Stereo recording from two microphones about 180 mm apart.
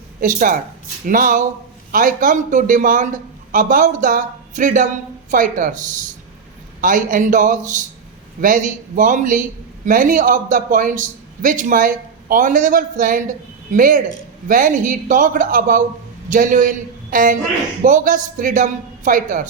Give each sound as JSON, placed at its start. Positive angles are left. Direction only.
{"t": 0.2, "sound": "a man's voice", "side_deg": -45}